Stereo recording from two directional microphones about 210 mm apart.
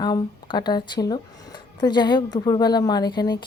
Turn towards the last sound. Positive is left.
turn(degrees=20)  # may be behind; listen again after turning